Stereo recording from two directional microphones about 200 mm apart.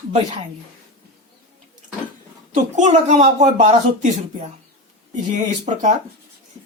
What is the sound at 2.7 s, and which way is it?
Speech, 35° right (ahead or behind).